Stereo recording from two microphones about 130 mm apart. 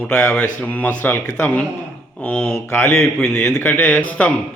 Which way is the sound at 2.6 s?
20° left (ahead or behind).